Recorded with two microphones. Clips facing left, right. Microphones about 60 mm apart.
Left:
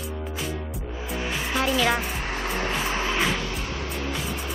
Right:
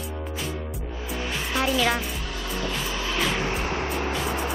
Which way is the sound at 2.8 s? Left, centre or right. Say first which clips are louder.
Left 3 dB; left.